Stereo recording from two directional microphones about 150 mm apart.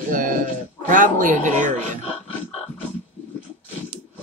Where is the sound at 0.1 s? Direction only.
65° right (ahead or behind).